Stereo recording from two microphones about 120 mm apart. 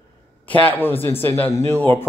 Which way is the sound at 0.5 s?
15° left (ahead or behind).